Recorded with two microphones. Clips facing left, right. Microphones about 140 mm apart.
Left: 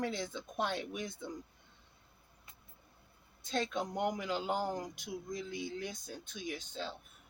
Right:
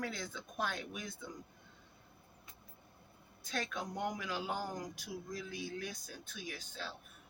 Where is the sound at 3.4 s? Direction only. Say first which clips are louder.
Left 5 dB; 25° left (ahead or behind).